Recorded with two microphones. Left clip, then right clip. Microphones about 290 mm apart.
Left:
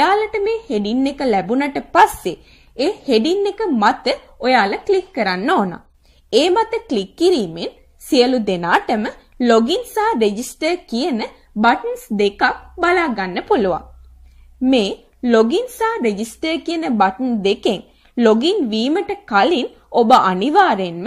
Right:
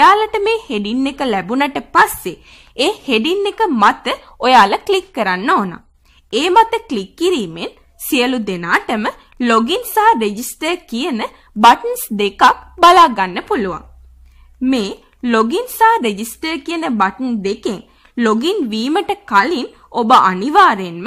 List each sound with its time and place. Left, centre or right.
0.0 s a woman's voice: centre